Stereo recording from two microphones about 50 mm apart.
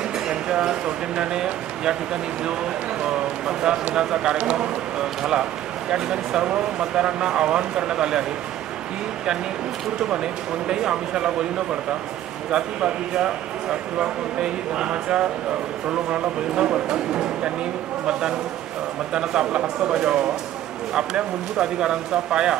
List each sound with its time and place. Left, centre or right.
0.3 s speech: centre
9.9 s speech: centre
12.4 s speech: centre
19.1 s speech: centre
21.5 s speech: centre